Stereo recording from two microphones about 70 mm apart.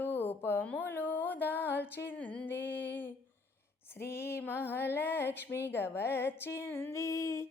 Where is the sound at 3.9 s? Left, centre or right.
Left.